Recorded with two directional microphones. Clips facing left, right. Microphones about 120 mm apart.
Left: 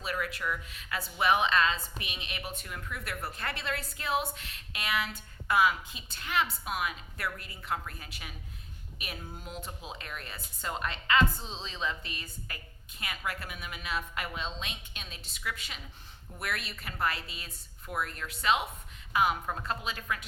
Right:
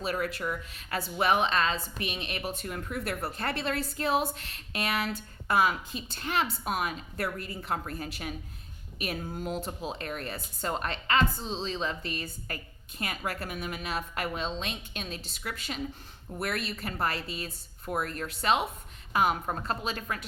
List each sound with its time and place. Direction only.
0.0 s a woman's voice: 35° right (ahead or behind)